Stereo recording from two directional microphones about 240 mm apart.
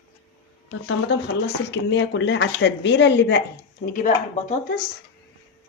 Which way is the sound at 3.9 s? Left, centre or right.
Left.